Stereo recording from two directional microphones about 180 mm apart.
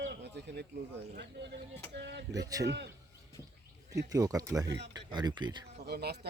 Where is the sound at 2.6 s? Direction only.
75° right (ahead or behind).